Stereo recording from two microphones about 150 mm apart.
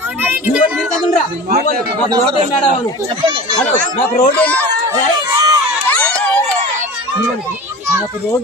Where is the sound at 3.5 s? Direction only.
50° left (ahead or behind).